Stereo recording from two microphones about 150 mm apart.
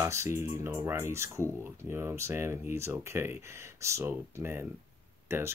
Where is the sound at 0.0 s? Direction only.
20° right (ahead or behind).